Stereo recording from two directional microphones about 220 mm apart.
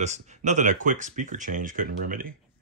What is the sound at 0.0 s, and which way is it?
Speech, 30° right (ahead or behind).